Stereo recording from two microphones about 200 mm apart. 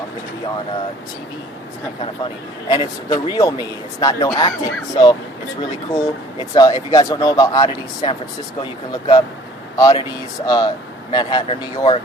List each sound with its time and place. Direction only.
2.6 s speech: 20° left (ahead or behind)
6.5 s speech: 20° left (ahead or behind)